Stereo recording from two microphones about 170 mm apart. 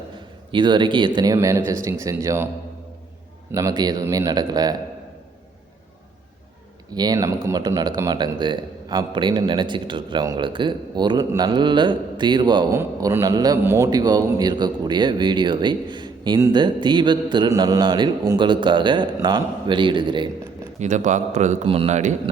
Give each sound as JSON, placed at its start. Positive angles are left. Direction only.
{"t": 0.5, "sound": "a man's voice", "side_deg": -25}
{"t": 3.5, "sound": "a man's voice", "side_deg": -20}
{"t": 6.9, "sound": "a man's voice", "side_deg": -25}
{"t": 20.7, "sound": "a man's voice", "side_deg": -45}